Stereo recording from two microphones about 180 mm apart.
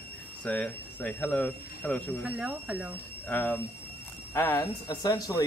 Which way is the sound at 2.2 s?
5° right (ahead or behind).